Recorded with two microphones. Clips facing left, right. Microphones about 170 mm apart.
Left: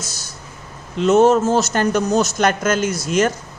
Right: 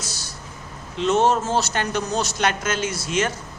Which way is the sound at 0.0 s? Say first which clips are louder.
Left 1 dB; 45° left (ahead or behind).